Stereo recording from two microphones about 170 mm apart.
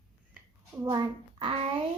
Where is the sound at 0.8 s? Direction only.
25° right (ahead or behind).